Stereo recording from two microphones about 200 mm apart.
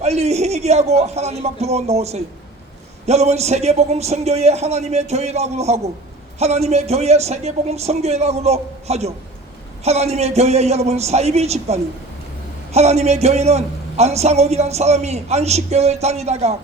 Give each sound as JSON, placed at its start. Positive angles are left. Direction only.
{"t": 0.0, "sound": "a man's voice", "side_deg": -35}